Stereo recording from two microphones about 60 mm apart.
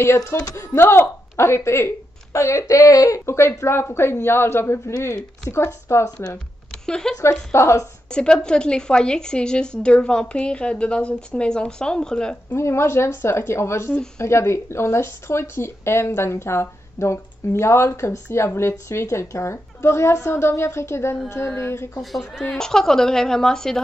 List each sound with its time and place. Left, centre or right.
0.0 s a woman's voice: left
2.7 s speech: left
3.3 s a woman's voice: left
6.9 s a woman's voice: centre
7.5 s a woman's voice: left
8.1 s a woman's voice: centre
12.5 s a woman's voice: left
22.4 s a woman's voice: centre